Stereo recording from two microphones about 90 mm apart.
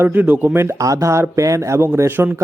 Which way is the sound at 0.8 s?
40° right (ahead or behind).